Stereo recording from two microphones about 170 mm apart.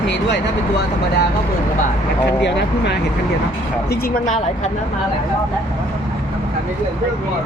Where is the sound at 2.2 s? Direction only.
90° left.